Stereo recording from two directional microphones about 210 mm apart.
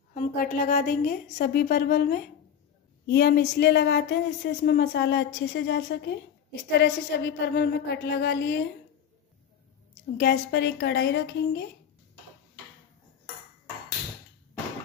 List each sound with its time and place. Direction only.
0.1 s speech: 40° left (ahead or behind)
10.1 s speech: 50° left (ahead or behind)